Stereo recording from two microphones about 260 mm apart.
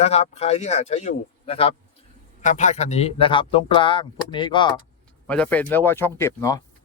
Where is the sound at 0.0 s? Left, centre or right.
Left.